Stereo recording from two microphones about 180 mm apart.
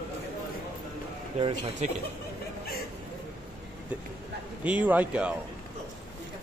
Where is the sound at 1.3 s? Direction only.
30° right (ahead or behind).